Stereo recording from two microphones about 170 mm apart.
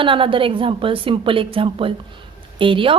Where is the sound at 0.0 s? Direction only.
30° right (ahead or behind).